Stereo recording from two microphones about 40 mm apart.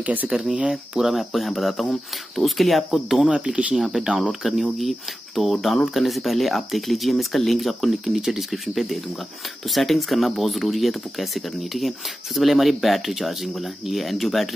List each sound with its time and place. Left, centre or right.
0.0 s speech: right
0.3 s speech: centre
1.1 s speech: centre
3.3 s speech: right
3.7 s speech: centre